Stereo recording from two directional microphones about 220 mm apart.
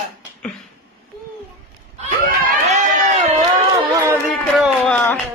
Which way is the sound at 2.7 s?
35° right (ahead or behind).